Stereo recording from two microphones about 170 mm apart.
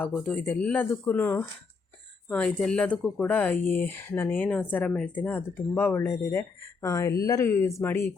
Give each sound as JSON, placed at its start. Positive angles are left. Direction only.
{"t": 0.0, "sound": "speech", "side_deg": 10}